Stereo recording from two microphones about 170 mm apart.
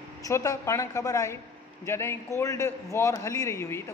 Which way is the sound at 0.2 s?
20° left (ahead or behind).